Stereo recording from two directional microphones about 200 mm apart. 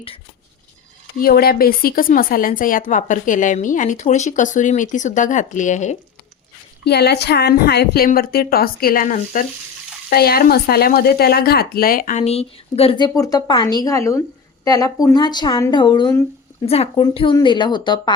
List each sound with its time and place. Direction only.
1.2 s a woman's voice: 50° left (ahead or behind)
6.8 s a woman's voice: 55° left (ahead or behind); by 18.1 s 25° left (ahead or behind)